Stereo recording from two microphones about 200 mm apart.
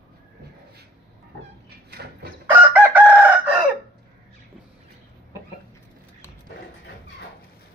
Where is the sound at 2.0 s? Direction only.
55° right (ahead or behind).